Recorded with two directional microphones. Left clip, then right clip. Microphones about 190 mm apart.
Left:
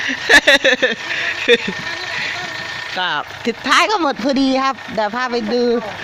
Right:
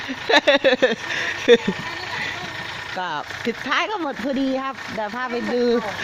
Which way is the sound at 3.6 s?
15° left (ahead or behind).